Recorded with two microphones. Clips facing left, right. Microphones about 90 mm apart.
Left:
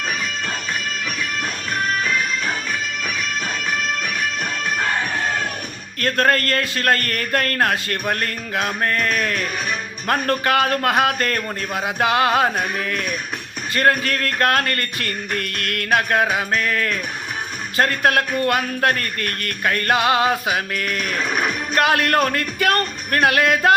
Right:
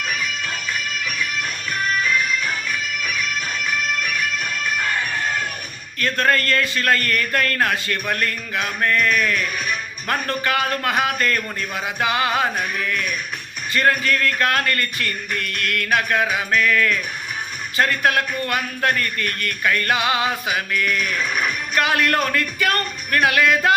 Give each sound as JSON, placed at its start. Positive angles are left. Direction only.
{"t": 0.0, "sound": "music", "side_deg": 35}
{"t": 4.6, "sound": "bagpipes", "side_deg": 35}
{"t": 6.0, "sound": "speech", "side_deg": 45}
{"t": 12.8, "sound": "music", "side_deg": 40}
{"t": 13.7, "sound": "speech", "side_deg": 45}
{"t": 16.5, "sound": "music", "side_deg": 35}
{"t": 17.7, "sound": "speech", "side_deg": 50}
{"t": 21.8, "sound": "speech", "side_deg": 50}